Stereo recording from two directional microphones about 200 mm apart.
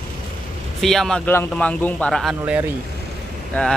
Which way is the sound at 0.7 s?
Centre (ahead or behind).